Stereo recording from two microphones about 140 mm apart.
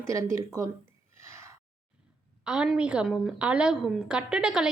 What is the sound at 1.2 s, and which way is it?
Gasp, 20° right (ahead or behind).